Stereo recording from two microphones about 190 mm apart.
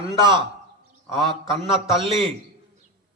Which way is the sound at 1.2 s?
Centre (ahead or behind).